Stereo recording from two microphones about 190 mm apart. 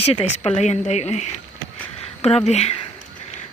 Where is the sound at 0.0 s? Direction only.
30° left (ahead or behind).